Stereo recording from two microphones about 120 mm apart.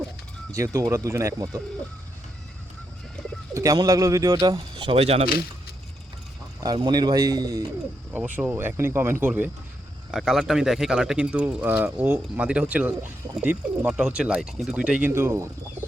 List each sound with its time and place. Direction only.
0.5 s speech: 25° right (ahead or behind)
3.5 s speech: 30° right (ahead or behind); by 5.3 s 55° right (ahead or behind)
6.7 s speech: 35° right (ahead or behind)
8.4 s speech: 15° right (ahead or behind)
10.1 s speech: centre (ahead or behind)
15.1 s speech: 20° right (ahead or behind)